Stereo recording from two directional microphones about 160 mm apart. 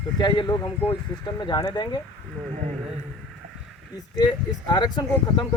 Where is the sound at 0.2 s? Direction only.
30° left (ahead or behind).